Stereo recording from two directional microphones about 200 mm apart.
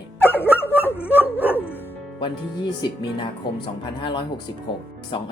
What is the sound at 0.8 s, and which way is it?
Dog, 10° left (ahead or behind).